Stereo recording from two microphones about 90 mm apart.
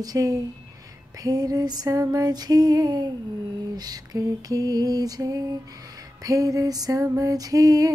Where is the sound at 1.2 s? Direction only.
45° right (ahead or behind).